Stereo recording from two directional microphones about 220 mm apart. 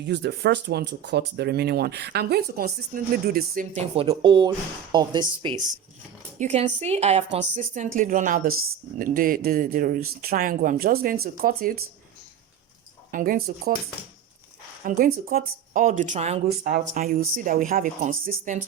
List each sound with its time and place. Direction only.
0.0 s speech: 50° right (ahead or behind)
3.9 s speech: 25° right (ahead or behind)
6.4 s speech: 30° right (ahead or behind)
13.1 s speech: 40° right (ahead or behind)
14.8 s speech: 40° right (ahead or behind)